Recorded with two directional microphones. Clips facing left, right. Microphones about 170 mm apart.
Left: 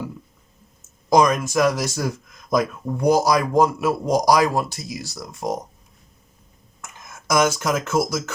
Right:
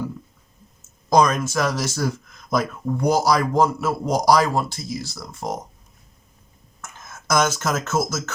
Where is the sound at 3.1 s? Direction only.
15° left (ahead or behind).